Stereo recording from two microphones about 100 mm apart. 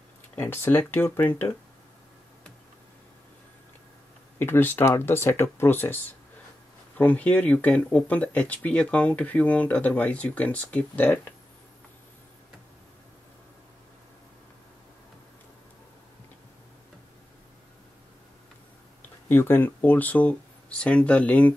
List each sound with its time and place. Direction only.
0.4 s speech: 25° left (ahead or behind)
4.4 s speech: 20° left (ahead or behind)
19.2 s speech: 20° left (ahead or behind)